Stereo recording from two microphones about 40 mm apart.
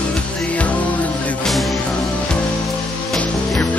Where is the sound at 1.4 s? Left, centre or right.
Centre.